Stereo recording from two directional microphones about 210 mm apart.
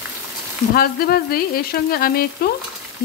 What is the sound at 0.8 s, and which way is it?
Frying, 45° left (ahead or behind).